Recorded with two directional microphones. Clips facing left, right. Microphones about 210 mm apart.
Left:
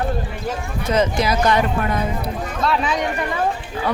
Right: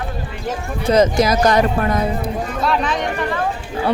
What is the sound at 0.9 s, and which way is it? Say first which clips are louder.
Speech: right 5 dB; 40° right (ahead or behind).